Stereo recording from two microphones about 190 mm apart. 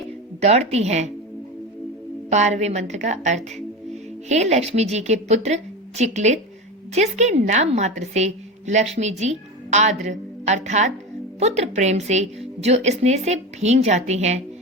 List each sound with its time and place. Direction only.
0.4 s a woman's voice: 35° right (ahead or behind)
2.3 s a woman's voice: 35° right (ahead or behind)